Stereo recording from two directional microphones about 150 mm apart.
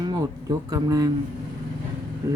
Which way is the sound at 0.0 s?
25° right (ahead or behind).